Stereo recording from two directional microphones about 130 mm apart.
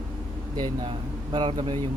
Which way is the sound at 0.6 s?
40° right (ahead or behind).